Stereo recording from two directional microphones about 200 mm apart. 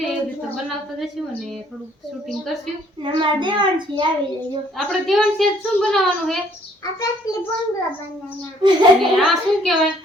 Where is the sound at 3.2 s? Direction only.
25° right (ahead or behind).